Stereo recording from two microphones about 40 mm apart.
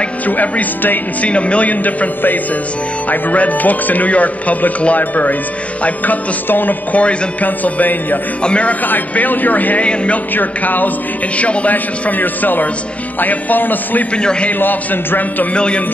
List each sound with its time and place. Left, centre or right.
0.3 s speech: left
8.4 s a man's voice: left
8.8 s speech: left
9.8 s speech: left
10.3 s speech: left
11.3 s speech: left
11.7 s speech: left
14.1 s a man's voice: left
14.6 s speech: left
15.5 s a man's voice: left